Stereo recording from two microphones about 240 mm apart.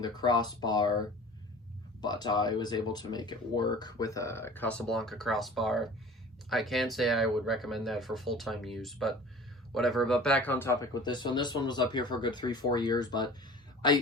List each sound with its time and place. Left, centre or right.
0.0 s speech: centre